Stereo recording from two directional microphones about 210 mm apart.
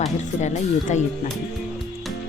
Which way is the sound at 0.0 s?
35° left (ahead or behind).